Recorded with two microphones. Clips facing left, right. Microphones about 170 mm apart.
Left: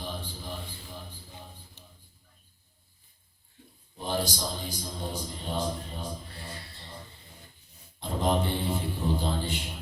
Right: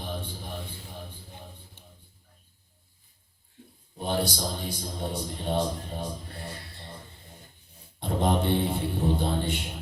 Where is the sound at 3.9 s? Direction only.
60° right (ahead or behind).